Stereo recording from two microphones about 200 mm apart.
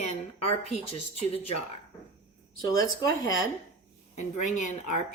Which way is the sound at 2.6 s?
20° left (ahead or behind).